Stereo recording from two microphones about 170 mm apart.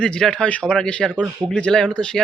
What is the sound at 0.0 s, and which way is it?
A man's voice, 5° left (ahead or behind).